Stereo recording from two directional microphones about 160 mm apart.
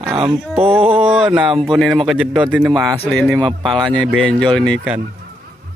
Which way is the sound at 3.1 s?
10° left (ahead or behind).